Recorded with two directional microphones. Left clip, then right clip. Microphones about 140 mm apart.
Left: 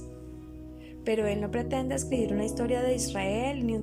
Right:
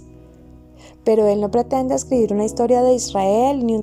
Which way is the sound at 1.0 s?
45° right (ahead or behind).